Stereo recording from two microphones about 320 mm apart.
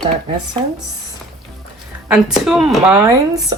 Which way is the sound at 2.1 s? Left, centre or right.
Centre.